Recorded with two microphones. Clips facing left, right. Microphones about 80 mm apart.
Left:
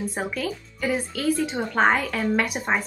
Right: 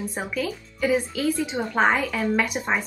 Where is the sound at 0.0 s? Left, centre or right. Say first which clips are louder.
Even; centre.